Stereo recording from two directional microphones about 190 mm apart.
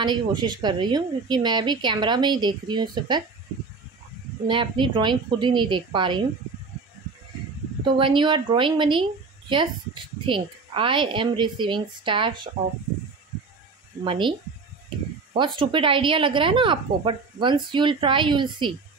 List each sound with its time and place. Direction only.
0.0 s speech: 25° right (ahead or behind)
4.5 s speech: 25° right (ahead or behind)
7.8 s speech: 25° right (ahead or behind)
14.0 s speech: 25° right (ahead or behind)
15.3 s speech: 25° right (ahead or behind)